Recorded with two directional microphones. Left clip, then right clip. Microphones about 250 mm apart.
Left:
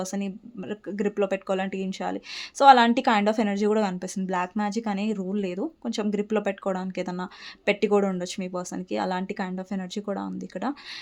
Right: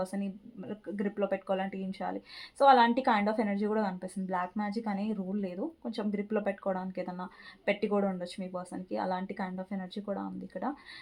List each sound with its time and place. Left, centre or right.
0.0 s speech: left